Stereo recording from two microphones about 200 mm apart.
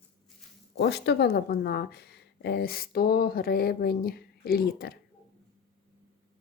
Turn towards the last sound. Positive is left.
turn(degrees=50)  # may be behind; listen again after turning